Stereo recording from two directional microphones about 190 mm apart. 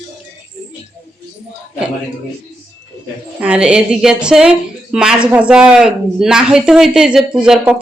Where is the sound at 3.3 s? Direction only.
5° right (ahead or behind).